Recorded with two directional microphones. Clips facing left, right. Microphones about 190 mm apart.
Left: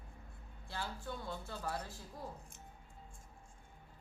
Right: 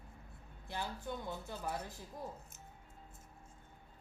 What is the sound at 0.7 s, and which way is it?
A woman's voice, 20° right (ahead or behind).